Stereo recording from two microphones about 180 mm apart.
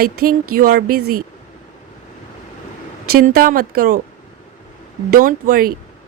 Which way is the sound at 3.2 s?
50° right (ahead or behind).